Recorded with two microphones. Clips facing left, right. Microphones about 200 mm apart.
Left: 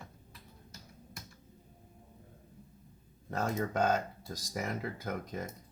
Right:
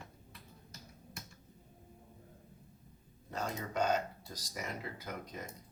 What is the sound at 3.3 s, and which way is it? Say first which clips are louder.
Speech: left 6 dB; 50° left (ahead or behind).